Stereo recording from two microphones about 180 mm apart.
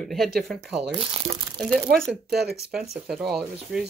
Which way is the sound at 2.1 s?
65° right (ahead or behind).